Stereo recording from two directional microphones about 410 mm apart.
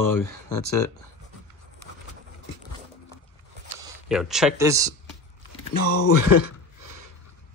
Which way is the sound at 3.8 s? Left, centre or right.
Centre.